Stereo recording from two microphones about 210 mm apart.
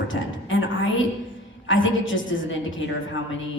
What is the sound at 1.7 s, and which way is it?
A woman's voice, 65° left (ahead or behind).